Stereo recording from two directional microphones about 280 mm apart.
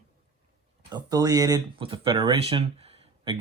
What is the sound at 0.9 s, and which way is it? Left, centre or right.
Speech, centre.